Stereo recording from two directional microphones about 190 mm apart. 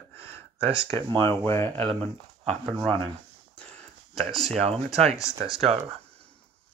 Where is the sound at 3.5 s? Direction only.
5° left (ahead or behind).